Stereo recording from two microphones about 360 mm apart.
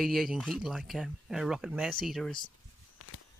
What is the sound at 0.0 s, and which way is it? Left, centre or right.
Speech, centre.